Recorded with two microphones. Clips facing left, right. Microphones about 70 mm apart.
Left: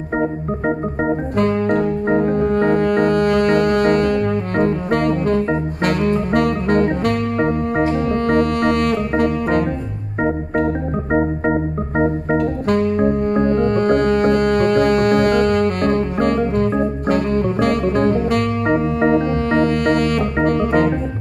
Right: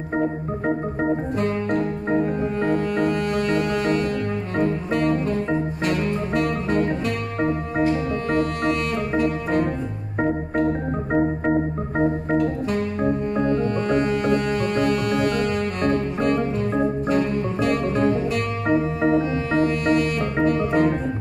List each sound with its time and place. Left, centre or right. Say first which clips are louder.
0.2 s organ: left 3 dB; left
1.4 s music: left 9 dB; left
11.5 s organ: left 3 dB; left
12.4 s music: left 5 dB; left